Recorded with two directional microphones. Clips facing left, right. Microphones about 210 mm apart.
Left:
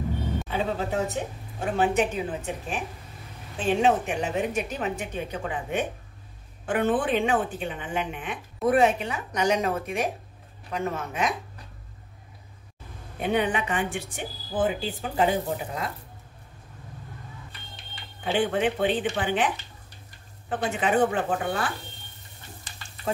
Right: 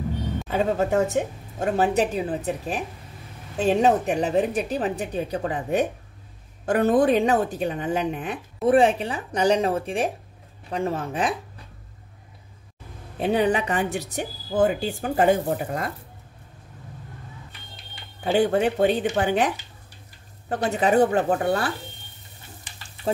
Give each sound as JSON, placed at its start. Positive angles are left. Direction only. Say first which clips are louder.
{"t": 0.5, "sound": "a woman's voice", "louder": "right 7 dB", "side_deg": -45}
{"t": 13.2, "sound": "a woman's voice", "louder": "right 4 dB", "side_deg": -35}
{"t": 18.2, "sound": "a woman's voice", "louder": "right 4 dB", "side_deg": -40}